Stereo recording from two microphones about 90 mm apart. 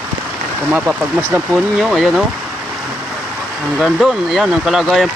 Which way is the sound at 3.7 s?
5° right (ahead or behind).